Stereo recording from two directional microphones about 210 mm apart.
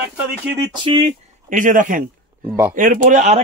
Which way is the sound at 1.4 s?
40° right (ahead or behind).